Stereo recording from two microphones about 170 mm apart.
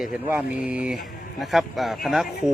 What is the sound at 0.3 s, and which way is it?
Speech, 10° right (ahead or behind).